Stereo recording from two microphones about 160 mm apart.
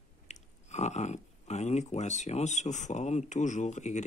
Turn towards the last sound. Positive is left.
turn(degrees=45)  # may be behind; listen again after turning